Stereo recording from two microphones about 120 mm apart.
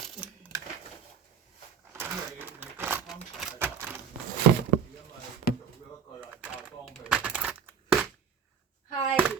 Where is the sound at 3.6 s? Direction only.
15° right (ahead or behind).